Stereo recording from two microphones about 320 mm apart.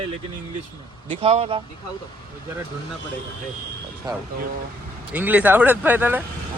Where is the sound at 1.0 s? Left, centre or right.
Centre.